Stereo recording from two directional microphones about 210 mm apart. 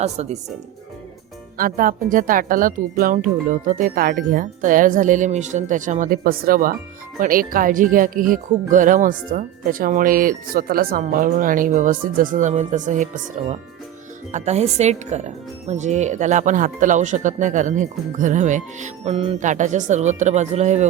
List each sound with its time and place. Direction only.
0.0 s speech: 30° right (ahead or behind)
1.5 s speech: 40° right (ahead or behind)